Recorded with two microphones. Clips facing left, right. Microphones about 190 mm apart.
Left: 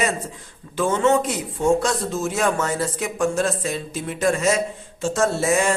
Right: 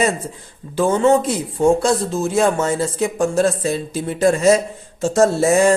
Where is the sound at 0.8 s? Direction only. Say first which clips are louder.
Right 4 dB; 35° right (ahead or behind).